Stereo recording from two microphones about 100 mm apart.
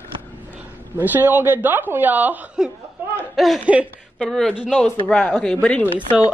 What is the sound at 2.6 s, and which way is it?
A woman's voice, 5° right (ahead or behind).